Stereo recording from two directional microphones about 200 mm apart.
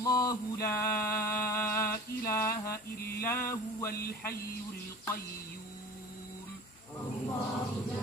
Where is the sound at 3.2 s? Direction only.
10° left (ahead or behind).